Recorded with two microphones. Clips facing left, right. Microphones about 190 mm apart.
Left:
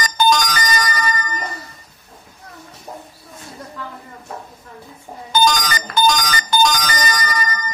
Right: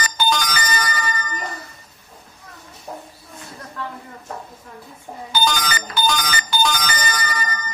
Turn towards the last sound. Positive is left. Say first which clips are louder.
# left 3 dB
turn(degrees=40)  # may be behind; listen again after turning